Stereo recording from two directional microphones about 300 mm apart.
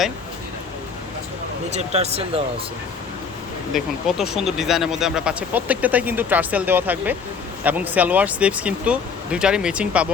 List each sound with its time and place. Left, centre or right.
1.7 s speech: right
3.7 s speech: centre